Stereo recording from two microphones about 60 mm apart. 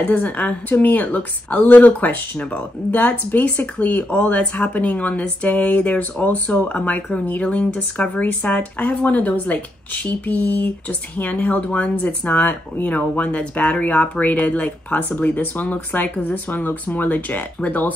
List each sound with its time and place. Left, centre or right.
0.0 s speech: left